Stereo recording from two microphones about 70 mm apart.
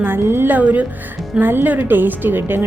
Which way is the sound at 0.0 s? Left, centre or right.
Right.